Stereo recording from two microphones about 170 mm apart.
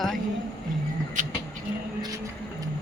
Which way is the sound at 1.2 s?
45° right (ahead or behind).